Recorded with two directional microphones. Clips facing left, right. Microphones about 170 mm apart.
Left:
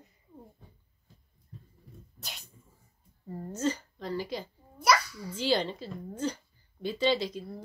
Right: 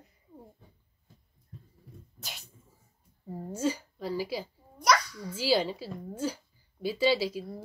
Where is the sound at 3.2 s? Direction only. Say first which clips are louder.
Even; 10° right (ahead or behind).